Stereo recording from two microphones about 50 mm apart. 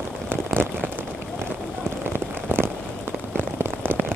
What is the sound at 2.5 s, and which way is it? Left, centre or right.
Rain on surface, right.